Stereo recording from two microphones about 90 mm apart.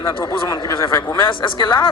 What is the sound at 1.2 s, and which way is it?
Speech, 65° left (ahead or behind).